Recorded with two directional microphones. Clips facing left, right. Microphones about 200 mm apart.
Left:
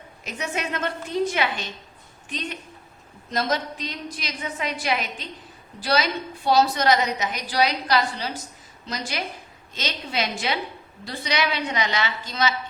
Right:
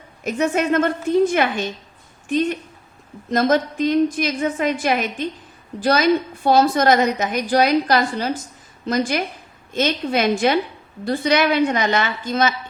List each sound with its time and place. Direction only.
0.3 s a woman's voice: 50° right (ahead or behind)